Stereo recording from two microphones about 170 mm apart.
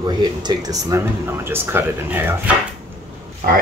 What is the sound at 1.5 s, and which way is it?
Speech, 15° right (ahead or behind).